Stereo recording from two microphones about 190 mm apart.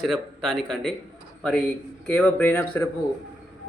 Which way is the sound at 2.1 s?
10° left (ahead or behind).